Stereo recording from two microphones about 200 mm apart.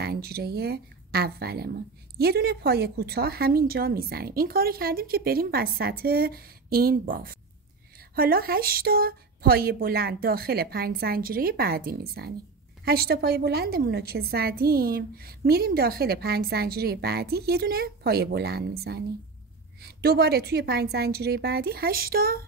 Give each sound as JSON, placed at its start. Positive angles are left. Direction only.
{"t": 0.0, "sound": "a woman's voice", "side_deg": -50}